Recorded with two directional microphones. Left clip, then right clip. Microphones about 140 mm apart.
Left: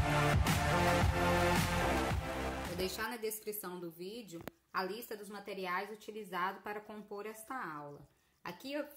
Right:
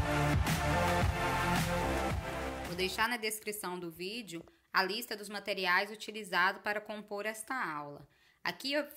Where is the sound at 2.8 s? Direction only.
15° right (ahead or behind).